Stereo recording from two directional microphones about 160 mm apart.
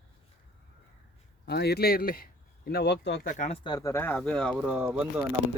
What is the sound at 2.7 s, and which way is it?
Speech, 90° left.